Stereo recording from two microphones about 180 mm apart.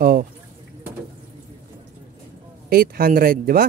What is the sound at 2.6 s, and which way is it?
Speech, 55° right (ahead or behind).